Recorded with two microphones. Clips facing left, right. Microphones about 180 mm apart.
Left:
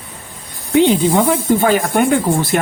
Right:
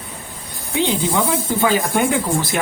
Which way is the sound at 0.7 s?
55° left (ahead or behind).